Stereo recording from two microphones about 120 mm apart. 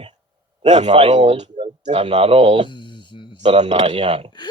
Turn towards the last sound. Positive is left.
turn(degrees=-50)  # may be behind; listen again after turning